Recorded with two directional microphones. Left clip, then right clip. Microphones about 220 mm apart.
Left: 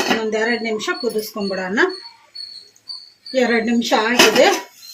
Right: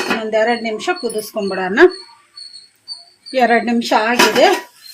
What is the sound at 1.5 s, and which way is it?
Speech, 50° right (ahead or behind).